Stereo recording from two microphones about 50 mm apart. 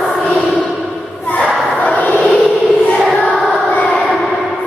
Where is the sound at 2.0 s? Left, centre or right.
Left.